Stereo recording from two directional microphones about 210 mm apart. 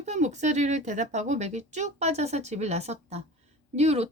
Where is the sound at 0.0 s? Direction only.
35° right (ahead or behind).